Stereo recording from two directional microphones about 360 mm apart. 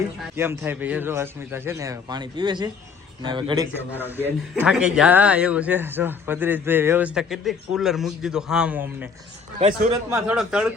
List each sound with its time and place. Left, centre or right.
0.3 s a man's voice: centre
9.6 s a man's voice: centre
10.1 s speech: centre